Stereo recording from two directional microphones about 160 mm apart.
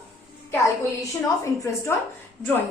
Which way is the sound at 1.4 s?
20° left (ahead or behind).